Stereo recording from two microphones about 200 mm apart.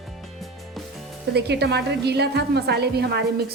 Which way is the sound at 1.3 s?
55° right (ahead or behind).